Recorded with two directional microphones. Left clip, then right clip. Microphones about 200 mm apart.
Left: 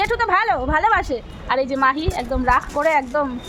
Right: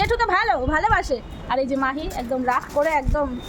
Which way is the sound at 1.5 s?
35° left (ahead or behind).